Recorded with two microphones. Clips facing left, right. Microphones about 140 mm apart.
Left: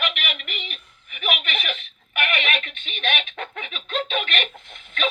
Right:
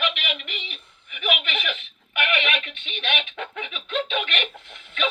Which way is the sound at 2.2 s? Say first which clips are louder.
Even; 40° left (ahead or behind).